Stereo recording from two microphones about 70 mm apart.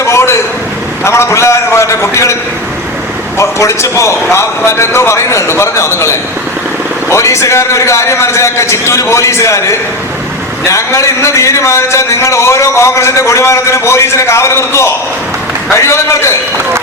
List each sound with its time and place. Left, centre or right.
0.0 s a sound: left
1.0 s a man's voice: left
3.3 s a man's voice: left